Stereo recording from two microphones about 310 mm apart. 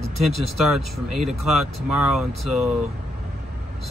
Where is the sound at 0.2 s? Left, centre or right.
Centre.